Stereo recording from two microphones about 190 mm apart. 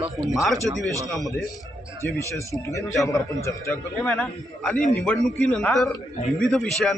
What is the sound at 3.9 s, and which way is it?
Speech, 5° left (ahead or behind).